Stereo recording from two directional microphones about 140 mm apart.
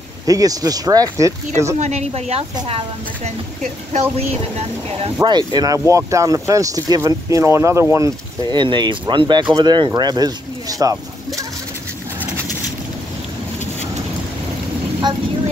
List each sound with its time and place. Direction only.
0.3 s speech: 25° right (ahead or behind)
1.8 s speech: 50° right (ahead or behind)
5.2 s speech: 30° right (ahead or behind)
8.5 s speech: 35° right (ahead or behind)